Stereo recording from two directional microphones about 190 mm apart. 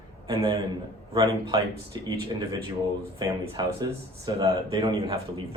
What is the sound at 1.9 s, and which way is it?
Speech, 20° right (ahead or behind).